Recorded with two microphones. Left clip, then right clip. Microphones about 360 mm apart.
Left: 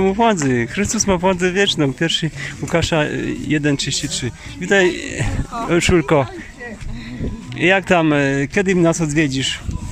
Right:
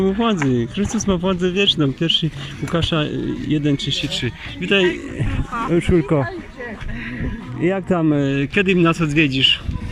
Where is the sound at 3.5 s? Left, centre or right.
Left.